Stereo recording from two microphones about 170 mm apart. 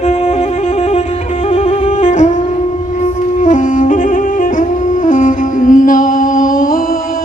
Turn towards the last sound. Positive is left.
turn(degrees=55)  # may be behind; listen again after turning